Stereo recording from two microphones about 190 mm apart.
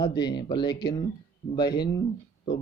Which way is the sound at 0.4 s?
25° left (ahead or behind).